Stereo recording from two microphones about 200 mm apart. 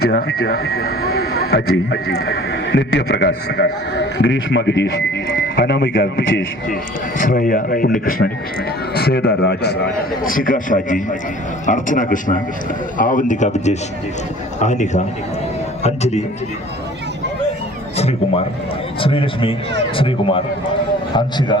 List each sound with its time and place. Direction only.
0.4 s a man's voice: 50° left (ahead or behind)
1.6 s speech: 90° left
2.3 s a man's voice: 60° left (ahead or behind)
7.2 s a man's voice: 45° left (ahead or behind)
17.9 s a man's voice: 30° left (ahead or behind)